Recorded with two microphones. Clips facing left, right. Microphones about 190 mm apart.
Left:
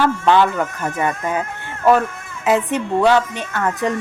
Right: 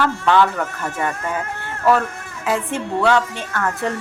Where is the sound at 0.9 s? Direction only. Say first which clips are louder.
Left 3 dB; 15° left (ahead or behind).